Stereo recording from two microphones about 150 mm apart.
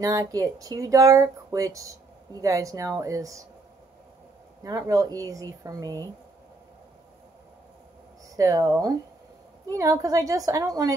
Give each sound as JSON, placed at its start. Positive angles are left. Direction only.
{"t": 0.0, "sound": "speech", "side_deg": -25}
{"t": 4.6, "sound": "speech", "side_deg": -25}
{"t": 8.4, "sound": "speech", "side_deg": -25}